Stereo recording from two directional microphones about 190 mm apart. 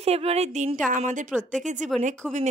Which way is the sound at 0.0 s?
35° right (ahead or behind).